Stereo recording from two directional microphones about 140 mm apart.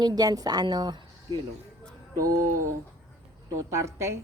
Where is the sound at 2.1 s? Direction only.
90° right.